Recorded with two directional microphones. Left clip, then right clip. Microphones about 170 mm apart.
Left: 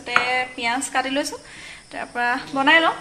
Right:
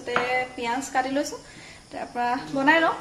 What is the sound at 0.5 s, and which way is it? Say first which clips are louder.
A woman's voice: left 3 dB; 10° left (ahead or behind).